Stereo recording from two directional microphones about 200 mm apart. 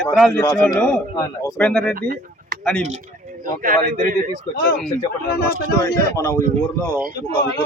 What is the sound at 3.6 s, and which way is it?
Speech, 45° right (ahead or behind).